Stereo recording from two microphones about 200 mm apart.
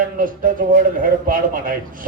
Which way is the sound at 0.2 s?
45° right (ahead or behind).